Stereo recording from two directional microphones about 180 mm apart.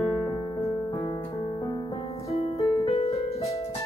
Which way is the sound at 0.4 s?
30° left (ahead or behind).